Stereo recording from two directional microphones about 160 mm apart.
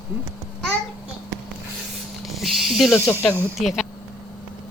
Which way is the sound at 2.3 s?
Centre (ahead or behind).